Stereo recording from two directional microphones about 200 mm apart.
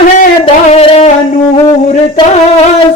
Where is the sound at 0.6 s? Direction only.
30° left (ahead or behind).